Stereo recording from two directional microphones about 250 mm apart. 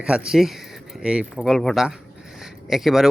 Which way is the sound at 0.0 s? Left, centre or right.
Centre.